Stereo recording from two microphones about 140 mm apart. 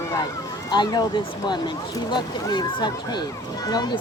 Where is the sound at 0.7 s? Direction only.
30° left (ahead or behind).